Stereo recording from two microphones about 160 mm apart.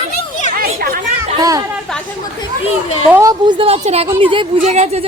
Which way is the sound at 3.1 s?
15° right (ahead or behind).